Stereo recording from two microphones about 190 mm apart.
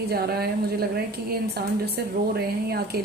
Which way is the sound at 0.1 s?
55° right (ahead or behind).